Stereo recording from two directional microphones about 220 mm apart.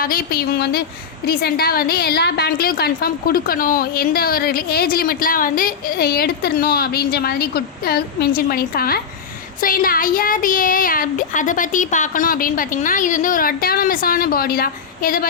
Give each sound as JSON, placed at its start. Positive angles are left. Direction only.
{"t": 0.0, "sound": "a woman's voice", "side_deg": 40}